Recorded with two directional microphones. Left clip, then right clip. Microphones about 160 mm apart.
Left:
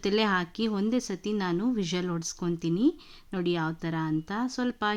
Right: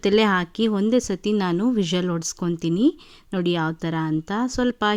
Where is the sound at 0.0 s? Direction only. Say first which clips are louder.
Right 7 dB; 35° right (ahead or behind).